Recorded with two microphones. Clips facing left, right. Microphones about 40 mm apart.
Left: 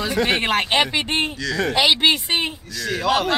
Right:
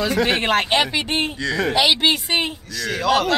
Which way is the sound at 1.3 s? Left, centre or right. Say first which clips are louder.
Right 2 dB; right.